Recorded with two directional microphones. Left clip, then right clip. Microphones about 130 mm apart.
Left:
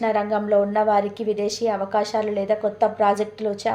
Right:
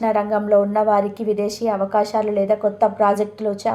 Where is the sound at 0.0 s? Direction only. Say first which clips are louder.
Right 3 dB; 25° right (ahead or behind).